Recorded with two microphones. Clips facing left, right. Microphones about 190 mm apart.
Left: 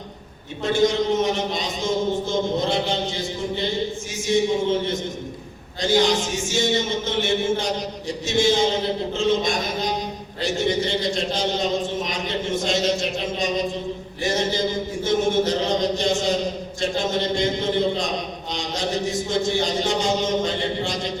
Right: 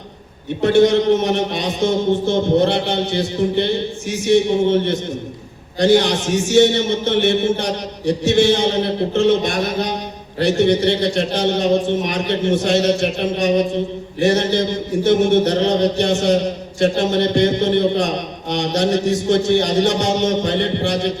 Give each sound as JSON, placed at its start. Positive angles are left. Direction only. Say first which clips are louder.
{"t": 0.6, "sound": "a man's voice", "louder": "right 7 dB", "side_deg": -65}